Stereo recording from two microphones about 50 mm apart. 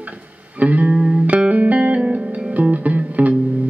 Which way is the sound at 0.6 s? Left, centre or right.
Right.